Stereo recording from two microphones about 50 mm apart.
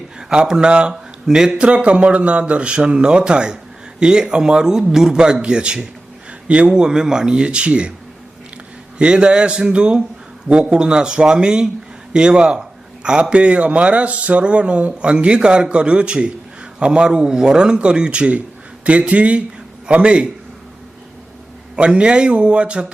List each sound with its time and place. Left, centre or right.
0.2 s a man's voice: centre
9.0 s a man's voice: right
21.8 s a man's voice: right